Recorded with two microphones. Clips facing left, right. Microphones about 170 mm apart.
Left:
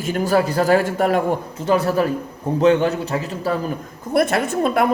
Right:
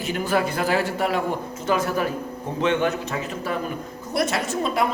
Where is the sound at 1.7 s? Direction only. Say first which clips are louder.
Left 5 dB; 30° left (ahead or behind).